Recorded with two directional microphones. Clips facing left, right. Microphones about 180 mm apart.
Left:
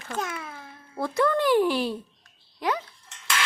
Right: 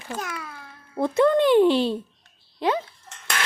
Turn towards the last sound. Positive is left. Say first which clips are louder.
# even
turn(degrees=-50)  # may be behind; listen again after turning